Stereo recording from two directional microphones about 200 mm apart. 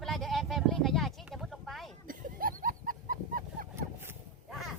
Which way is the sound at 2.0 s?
45° right (ahead or behind).